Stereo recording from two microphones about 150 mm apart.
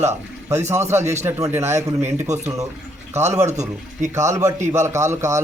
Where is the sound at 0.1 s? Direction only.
15° right (ahead or behind).